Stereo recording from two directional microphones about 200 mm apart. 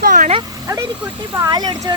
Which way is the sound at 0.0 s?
40° right (ahead or behind).